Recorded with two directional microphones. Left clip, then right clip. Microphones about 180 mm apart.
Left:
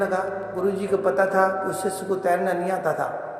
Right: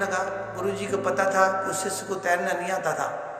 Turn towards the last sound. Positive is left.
turn(degrees=55)  # may be behind; listen again after turning